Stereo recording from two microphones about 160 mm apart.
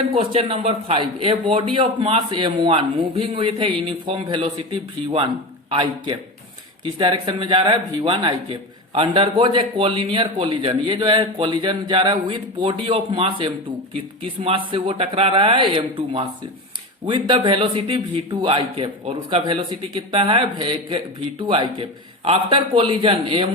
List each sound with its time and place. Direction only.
0.1 s a man's voice: 40° right (ahead or behind)